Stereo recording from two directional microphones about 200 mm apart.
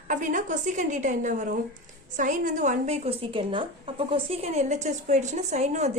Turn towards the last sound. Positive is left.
turn(degrees=-35)  # may be behind; listen again after turning